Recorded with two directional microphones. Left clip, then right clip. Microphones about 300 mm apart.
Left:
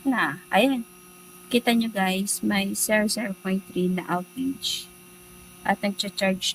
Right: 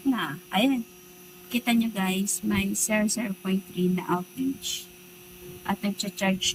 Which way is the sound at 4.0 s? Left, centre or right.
Centre.